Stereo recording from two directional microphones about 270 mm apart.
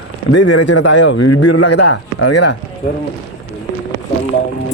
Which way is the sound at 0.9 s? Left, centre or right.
Left.